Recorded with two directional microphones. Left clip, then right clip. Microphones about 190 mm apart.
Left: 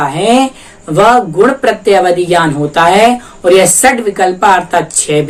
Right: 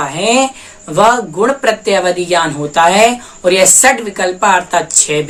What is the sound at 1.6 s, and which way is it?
Speech, 10° right (ahead or behind).